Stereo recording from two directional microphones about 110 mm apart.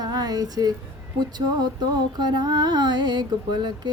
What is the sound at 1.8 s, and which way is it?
Speech, 40° right (ahead or behind).